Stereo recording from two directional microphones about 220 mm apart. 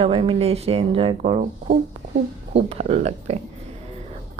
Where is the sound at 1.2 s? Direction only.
35° right (ahead or behind).